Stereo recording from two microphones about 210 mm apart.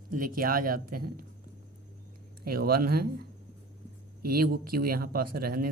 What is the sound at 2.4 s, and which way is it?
Speech, 45° right (ahead or behind).